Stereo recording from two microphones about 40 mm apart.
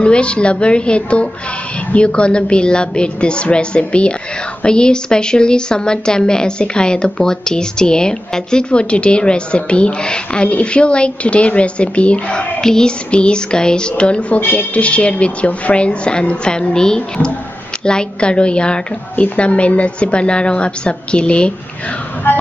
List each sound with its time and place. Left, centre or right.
0.0 s speech: left
22.3 s speech: left